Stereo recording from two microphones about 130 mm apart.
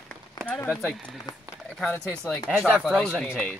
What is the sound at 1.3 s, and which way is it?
Speech, 35° left (ahead or behind).